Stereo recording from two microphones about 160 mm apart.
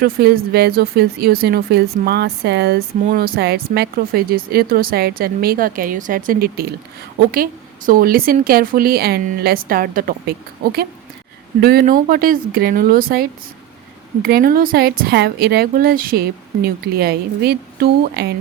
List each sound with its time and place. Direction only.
0.0 s speech: 75° right (ahead or behind)
7.9 s speech: 65° right (ahead or behind)
14.2 s speech: 75° right (ahead or behind); by 18.3 s 90° right